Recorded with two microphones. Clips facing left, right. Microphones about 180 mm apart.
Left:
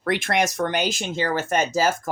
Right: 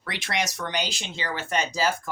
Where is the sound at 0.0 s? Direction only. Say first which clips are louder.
Left 8 dB; 50° left (ahead or behind).